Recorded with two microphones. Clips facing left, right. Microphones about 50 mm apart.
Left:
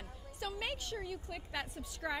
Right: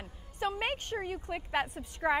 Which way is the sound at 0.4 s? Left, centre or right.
Right.